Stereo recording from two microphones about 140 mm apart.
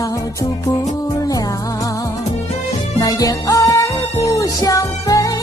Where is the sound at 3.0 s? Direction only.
25° left (ahead or behind).